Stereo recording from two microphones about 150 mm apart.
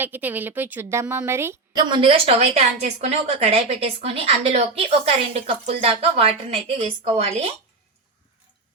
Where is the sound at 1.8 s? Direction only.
30° right (ahead or behind).